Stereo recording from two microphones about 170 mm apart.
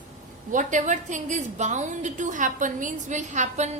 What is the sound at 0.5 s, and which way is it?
A woman's voice, 45° right (ahead or behind).